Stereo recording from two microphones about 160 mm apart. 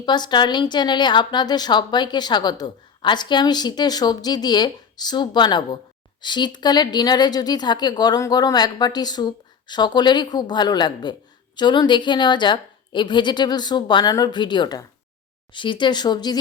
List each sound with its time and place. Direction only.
0.0 s a woman's voice: 25° left (ahead or behind)